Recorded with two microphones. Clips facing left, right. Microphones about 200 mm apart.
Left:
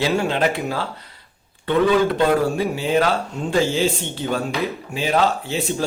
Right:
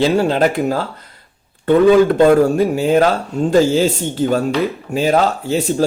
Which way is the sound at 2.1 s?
45° right (ahead or behind).